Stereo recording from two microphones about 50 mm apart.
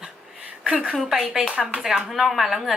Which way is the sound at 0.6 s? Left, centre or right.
Centre.